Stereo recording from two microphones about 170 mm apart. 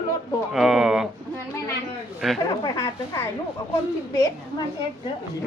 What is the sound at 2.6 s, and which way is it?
Speech, 20° left (ahead or behind).